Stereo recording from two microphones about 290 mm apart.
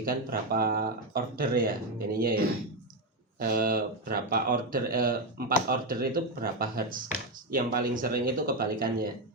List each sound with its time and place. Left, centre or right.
0.0 s speech: right